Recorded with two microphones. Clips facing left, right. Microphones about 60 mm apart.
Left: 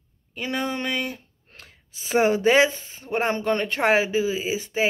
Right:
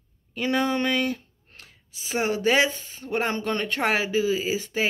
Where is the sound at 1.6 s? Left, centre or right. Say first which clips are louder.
Left 1 dB; left.